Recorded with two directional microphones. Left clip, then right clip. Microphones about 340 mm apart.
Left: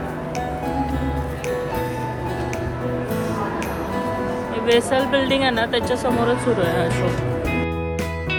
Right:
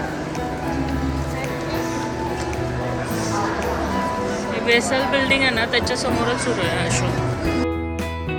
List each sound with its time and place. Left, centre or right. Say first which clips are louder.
4.6 s speech: left 1 dB; centre